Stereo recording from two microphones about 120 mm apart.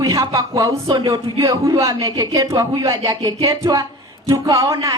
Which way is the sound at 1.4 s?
30° right (ahead or behind).